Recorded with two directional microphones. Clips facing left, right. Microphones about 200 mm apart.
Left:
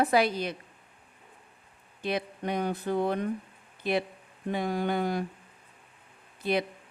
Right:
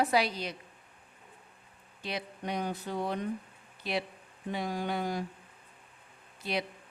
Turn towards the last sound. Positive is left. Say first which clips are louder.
# left 6 dB
turn(degrees=55)  # may be behind; listen again after turning